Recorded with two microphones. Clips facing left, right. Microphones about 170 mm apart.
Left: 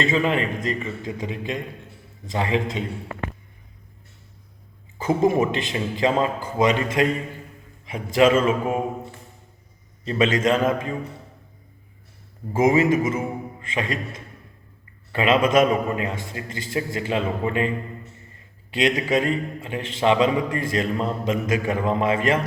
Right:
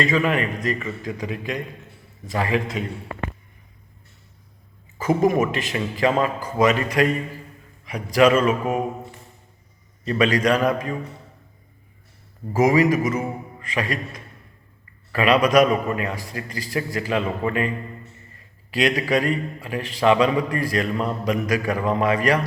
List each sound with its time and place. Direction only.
0.0 s a man's voice: 25° left (ahead or behind)
4.9 s a man's voice: 25° left (ahead or behind)
10.1 s a man's voice: 25° left (ahead or behind)
12.5 s a man's voice: 25° left (ahead or behind)
18.7 s a man's voice: 25° left (ahead or behind)